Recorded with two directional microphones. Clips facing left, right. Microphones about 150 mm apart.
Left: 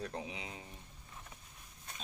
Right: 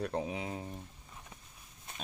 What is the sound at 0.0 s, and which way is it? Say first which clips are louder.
Speech: right 7 dB; 60° right (ahead or behind).